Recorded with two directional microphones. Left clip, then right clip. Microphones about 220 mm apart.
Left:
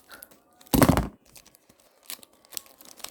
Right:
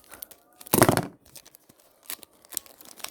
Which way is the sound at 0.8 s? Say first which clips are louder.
Right 1 dB; 15° right (ahead or behind).